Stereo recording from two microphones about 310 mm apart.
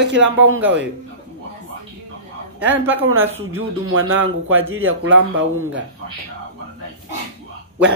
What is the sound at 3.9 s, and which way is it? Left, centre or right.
Speech, right.